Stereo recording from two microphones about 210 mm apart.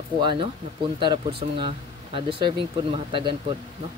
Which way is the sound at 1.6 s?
25° right (ahead or behind).